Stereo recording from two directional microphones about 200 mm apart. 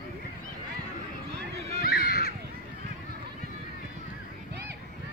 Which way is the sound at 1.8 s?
50° left (ahead or behind).